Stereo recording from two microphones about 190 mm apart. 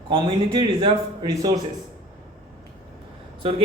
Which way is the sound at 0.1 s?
25° right (ahead or behind).